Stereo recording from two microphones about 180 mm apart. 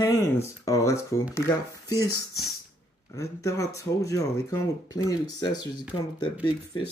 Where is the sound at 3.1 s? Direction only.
15° left (ahead or behind).